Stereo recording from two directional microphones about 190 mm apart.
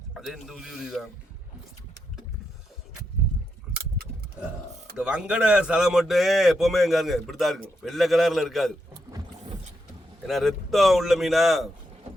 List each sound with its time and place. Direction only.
0.1 s a man's voice: centre (ahead or behind)
4.0 s keys jangling: 55° right (ahead or behind)
4.9 s a man's voice: 5° right (ahead or behind)
10.2 s a man's voice: centre (ahead or behind)